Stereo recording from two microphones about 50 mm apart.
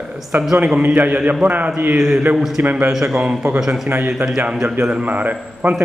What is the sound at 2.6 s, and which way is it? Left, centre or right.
Speech, right.